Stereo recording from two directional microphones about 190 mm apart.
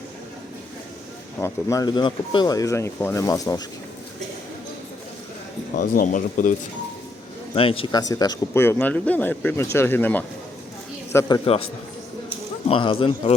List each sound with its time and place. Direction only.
1.4 s speech: 20° left (ahead or behind)
5.7 s speech: 45° left (ahead or behind)
7.5 s a man's voice: 30° left (ahead or behind)
12.6 s speech: 25° left (ahead or behind)